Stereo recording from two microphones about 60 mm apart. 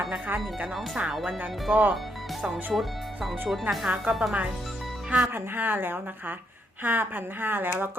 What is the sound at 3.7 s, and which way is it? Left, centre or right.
Speech, right.